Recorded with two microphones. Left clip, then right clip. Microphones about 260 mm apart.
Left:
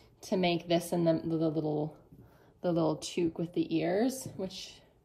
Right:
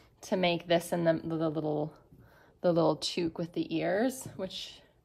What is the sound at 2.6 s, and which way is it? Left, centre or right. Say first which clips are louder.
A woman's voice: right 4 dB; centre.